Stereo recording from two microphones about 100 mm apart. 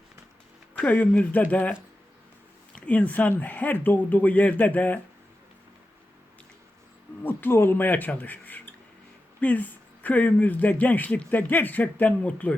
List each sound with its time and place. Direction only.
0.8 s speech: 15° left (ahead or behind)
2.7 s speech: 15° left (ahead or behind)
7.2 s speech: 20° left (ahead or behind)